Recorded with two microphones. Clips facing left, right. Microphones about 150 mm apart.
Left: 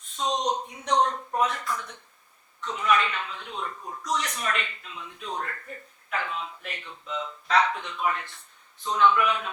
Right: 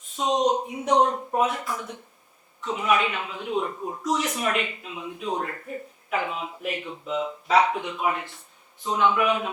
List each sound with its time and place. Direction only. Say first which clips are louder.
0.2 s speech: right 3 dB; 5° right (ahead or behind)
0.7 s a man's voice: right 4 dB; 20° right (ahead or behind)
1.3 s speech: right 2 dB; 10° right (ahead or behind)
2.6 s a man's voice: right 2 dB; 10° right (ahead or behind)